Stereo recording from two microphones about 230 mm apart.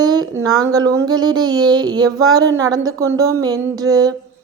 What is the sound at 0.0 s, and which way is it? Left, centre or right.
A woman's voice, centre.